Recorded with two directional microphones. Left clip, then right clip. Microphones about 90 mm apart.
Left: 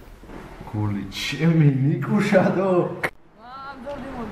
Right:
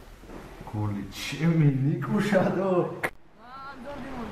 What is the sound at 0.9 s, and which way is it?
A man's voice, 10° left (ahead or behind).